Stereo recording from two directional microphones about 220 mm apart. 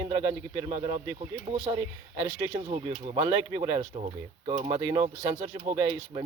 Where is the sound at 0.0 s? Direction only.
20° right (ahead or behind).